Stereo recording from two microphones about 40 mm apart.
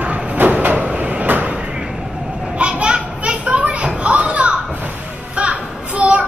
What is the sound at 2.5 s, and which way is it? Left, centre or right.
Children playing, right.